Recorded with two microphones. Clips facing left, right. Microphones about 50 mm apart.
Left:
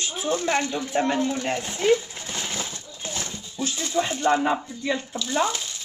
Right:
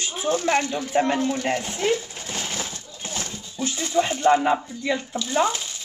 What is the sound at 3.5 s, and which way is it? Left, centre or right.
Speech, centre.